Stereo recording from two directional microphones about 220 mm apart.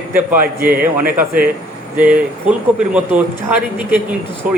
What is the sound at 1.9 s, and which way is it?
Speech, 5° right (ahead or behind).